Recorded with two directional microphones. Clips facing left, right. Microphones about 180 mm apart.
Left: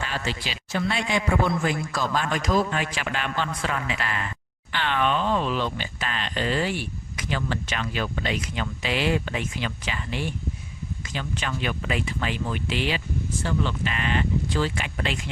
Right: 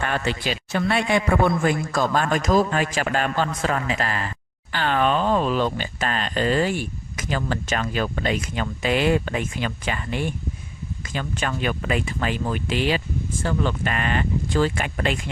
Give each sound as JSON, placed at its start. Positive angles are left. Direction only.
{"t": 0.0, "sound": "speech", "side_deg": -55}